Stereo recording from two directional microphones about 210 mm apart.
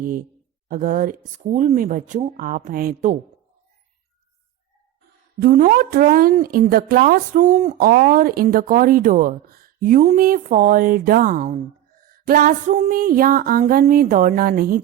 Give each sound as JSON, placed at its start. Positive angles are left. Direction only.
{"t": 0.0, "sound": "a woman's voice", "side_deg": -40}
{"t": 5.4, "sound": "a woman's voice", "side_deg": -40}